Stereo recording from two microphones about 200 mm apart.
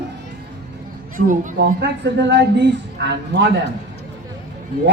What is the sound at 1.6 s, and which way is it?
Speech, 60° right (ahead or behind).